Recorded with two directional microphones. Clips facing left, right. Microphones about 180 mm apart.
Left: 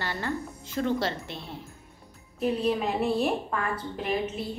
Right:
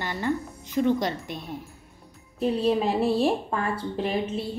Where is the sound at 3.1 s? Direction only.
30° right (ahead or behind).